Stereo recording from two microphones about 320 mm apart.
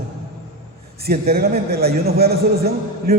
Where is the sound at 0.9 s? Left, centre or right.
Right.